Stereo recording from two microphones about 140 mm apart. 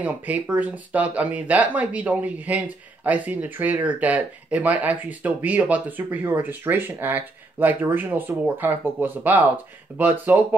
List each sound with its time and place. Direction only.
0.0 s speech: 10° right (ahead or behind)